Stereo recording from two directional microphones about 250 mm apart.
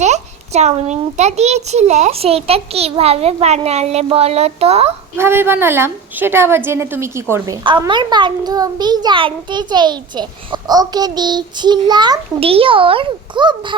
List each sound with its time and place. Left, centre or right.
0.0 s a child's voice: right
5.1 s a child's voice: centre